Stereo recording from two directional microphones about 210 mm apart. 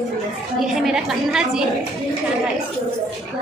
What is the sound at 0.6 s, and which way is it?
A woman's voice, centre (ahead or behind).